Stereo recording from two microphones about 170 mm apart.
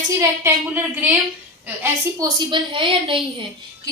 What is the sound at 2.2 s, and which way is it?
A woman's voice, 25° right (ahead or behind).